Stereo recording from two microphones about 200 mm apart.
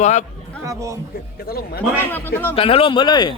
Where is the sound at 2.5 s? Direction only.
25° left (ahead or behind).